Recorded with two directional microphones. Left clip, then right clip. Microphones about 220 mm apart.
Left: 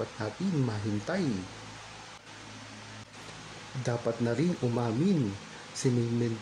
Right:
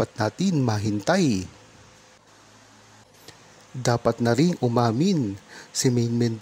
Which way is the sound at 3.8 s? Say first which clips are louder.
Right 9 dB; 40° right (ahead or behind).